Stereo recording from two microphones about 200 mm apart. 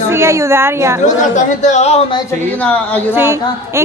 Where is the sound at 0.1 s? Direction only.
15° right (ahead or behind).